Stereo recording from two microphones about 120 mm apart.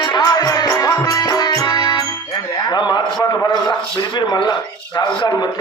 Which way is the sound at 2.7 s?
35° left (ahead or behind).